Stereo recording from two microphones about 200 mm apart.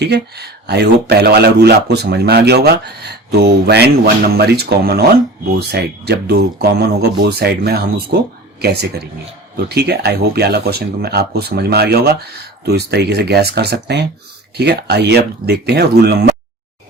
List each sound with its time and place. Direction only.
0.0 s speech: 55° right (ahead or behind)